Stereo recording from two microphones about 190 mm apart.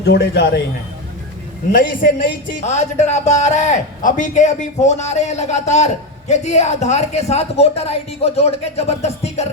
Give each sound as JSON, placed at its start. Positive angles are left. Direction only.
{"t": 0.0, "sound": "a man's voice", "side_deg": 60}
{"t": 1.7, "sound": "speech", "side_deg": 45}